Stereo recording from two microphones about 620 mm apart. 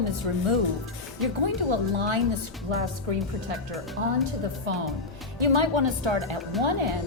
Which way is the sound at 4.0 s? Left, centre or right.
Right.